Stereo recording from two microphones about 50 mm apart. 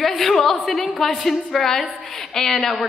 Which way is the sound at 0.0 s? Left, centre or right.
Centre.